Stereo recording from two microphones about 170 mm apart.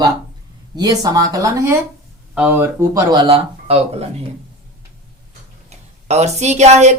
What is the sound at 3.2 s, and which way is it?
Speech, 35° right (ahead or behind).